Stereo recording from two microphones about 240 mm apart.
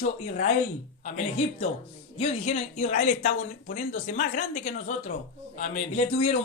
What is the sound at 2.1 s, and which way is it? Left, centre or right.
A man's voice, left.